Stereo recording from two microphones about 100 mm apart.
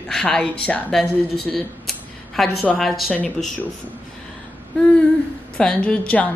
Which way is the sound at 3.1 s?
15° left (ahead or behind).